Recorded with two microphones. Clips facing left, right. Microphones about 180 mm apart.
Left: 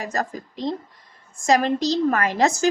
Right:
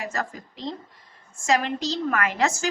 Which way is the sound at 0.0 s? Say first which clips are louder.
Left 4 dB; 40° left (ahead or behind).